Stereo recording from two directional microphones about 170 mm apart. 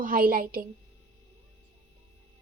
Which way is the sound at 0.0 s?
60° right (ahead or behind).